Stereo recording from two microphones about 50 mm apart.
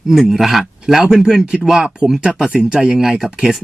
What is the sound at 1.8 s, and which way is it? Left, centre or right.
Speech, right.